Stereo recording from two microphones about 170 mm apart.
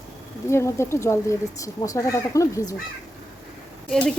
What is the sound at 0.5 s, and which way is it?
Speech, 15° left (ahead or behind).